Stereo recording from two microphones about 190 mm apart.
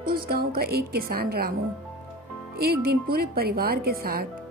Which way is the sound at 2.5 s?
55° right (ahead or behind).